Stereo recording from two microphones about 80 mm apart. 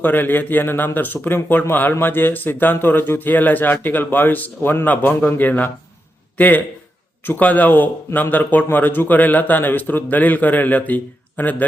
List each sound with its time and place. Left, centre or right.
0.0 s a man's voice: left